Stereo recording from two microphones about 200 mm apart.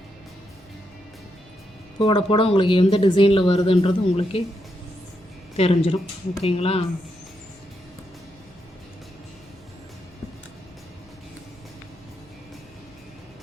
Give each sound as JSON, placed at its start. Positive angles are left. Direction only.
{"t": 2.0, "sound": "speech", "side_deg": 25}
{"t": 5.5, "sound": "speech", "side_deg": 30}